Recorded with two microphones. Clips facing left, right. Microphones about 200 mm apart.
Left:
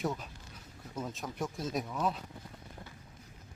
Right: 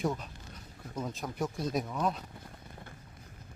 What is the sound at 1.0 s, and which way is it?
Speech, centre (ahead or behind).